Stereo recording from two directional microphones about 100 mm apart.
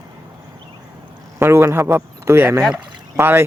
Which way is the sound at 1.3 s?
25° right (ahead or behind).